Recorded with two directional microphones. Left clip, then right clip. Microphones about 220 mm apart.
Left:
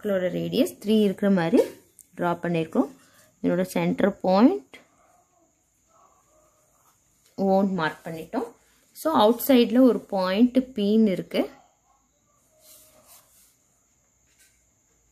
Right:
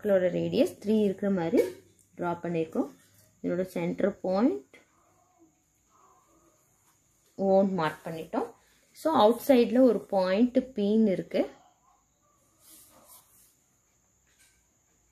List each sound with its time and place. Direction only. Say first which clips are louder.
0.0 s speech: right 1 dB; 5° left (ahead or behind)
1.2 s speech: left 5 dB; 30° left (ahead or behind)
7.3 s speech: left 1 dB; 20° left (ahead or behind)